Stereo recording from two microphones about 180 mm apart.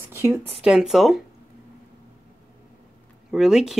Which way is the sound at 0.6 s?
5° right (ahead or behind).